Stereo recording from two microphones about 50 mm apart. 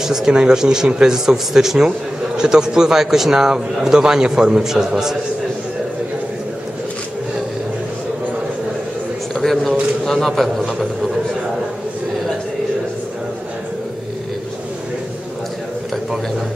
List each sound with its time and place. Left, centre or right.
0.0 s speech: centre
1.1 s speech: centre
9.3 s a sound: centre